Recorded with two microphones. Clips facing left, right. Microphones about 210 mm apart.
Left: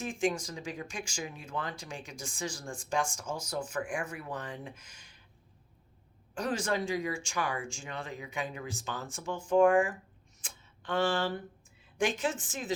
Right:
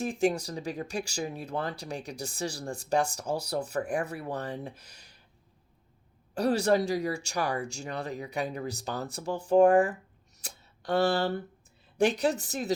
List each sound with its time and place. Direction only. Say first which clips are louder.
0.0 s speech: right 4 dB; 40° right (ahead or behind)
6.3 s speech: right 7 dB; 35° right (ahead or behind)
10.4 s a sound: right 6 dB; 40° right (ahead or behind)
11.9 s speech: right 5 dB; 40° right (ahead or behind)